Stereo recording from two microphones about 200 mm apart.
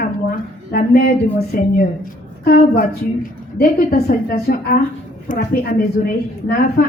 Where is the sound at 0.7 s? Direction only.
50° left (ahead or behind).